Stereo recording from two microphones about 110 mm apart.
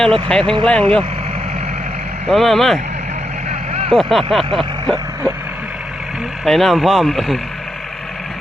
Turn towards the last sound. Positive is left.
turn(degrees=0)  # may be behind; listen again after turning